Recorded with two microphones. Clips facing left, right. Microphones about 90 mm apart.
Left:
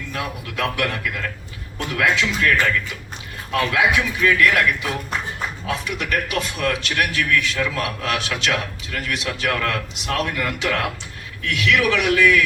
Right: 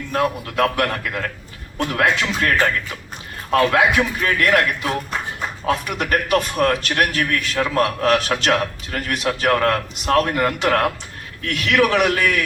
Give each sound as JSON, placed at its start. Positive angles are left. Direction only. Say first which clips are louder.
{"t": 0.1, "sound": "a man's voice", "louder": "right 9 dB", "side_deg": -45}